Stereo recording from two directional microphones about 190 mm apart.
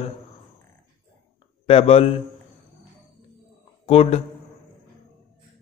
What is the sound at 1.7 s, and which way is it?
Speech, 30° left (ahead or behind).